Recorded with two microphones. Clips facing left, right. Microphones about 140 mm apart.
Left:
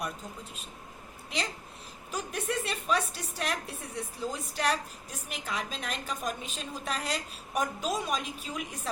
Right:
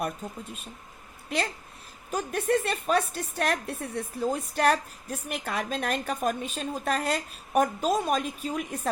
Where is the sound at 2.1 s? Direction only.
50° right (ahead or behind).